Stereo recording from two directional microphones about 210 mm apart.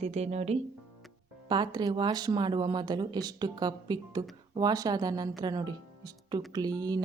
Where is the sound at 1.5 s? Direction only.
20° right (ahead or behind).